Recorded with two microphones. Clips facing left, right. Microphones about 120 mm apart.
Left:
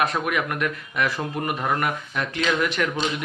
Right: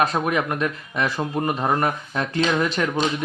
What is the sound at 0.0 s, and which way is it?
Speech, 30° right (ahead or behind).